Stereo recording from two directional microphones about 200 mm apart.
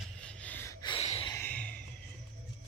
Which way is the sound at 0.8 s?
30° left (ahead or behind).